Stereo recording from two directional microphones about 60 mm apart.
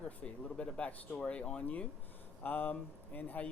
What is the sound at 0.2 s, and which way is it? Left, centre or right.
Speech, left.